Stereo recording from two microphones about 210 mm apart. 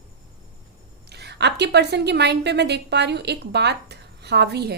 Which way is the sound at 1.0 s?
50° right (ahead or behind).